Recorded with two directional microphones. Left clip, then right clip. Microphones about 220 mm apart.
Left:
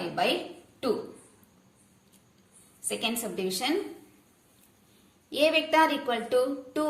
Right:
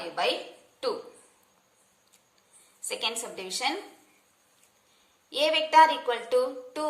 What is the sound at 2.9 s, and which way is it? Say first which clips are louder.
Speech: even; 15° right (ahead or behind).